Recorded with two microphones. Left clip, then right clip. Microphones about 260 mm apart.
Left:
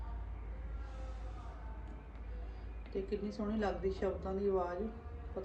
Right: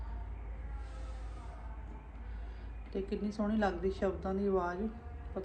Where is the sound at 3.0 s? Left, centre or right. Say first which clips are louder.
Right 4 dB; centre.